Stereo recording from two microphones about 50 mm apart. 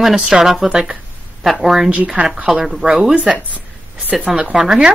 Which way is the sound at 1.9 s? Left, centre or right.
Right.